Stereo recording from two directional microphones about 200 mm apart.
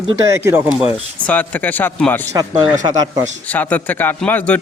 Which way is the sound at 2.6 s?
20° right (ahead or behind).